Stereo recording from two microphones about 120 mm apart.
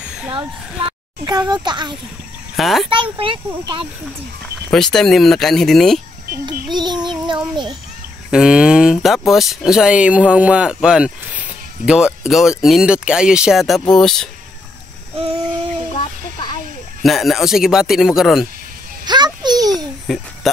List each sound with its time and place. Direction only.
1.2 s a child's voice: 35° right (ahead or behind)
2.5 s speech: centre (ahead or behind)
2.9 s speech: 45° right (ahead or behind)
4.6 s speech: 5° left (ahead or behind)
6.4 s child singing: 40° right (ahead or behind)
8.3 s speech: 5° right (ahead or behind)
15.1 s a sound: 50° right (ahead or behind)
17.0 s speech: centre (ahead or behind)
19.0 s a sound: 35° right (ahead or behind)
20.1 s speech: centre (ahead or behind)
20.4 s a sound: centre (ahead or behind)